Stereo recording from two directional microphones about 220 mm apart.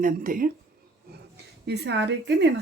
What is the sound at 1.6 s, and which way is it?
Speech, 50° right (ahead or behind).